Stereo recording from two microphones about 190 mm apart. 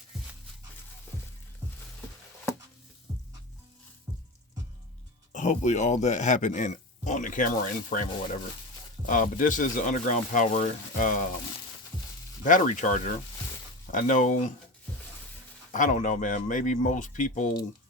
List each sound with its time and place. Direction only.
5.3 s speech: 40° left (ahead or behind)
12.5 s speech: 40° left (ahead or behind)
15.7 s speech: 40° left (ahead or behind)